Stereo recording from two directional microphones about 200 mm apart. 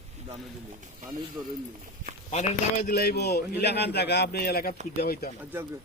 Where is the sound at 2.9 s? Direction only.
55° left (ahead or behind).